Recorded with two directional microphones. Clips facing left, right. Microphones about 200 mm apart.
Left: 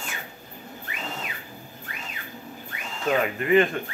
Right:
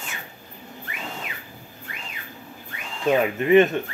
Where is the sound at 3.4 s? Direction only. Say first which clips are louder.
Right 4 dB; 25° right (ahead or behind).